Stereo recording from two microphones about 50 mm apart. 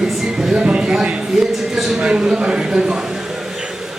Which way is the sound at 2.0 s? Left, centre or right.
Centre.